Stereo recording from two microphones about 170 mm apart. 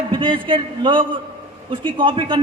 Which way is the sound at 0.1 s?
30° right (ahead or behind).